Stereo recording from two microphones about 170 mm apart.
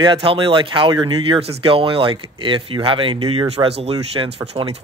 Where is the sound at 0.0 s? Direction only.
30° right (ahead or behind).